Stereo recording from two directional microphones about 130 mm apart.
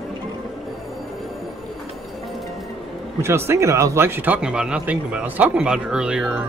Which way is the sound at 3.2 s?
20° right (ahead or behind).